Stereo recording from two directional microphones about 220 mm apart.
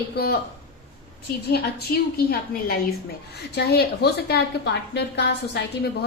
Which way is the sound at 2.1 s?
45° left (ahead or behind).